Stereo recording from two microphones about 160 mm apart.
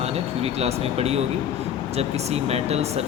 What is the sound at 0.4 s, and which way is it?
Speech, 40° right (ahead or behind).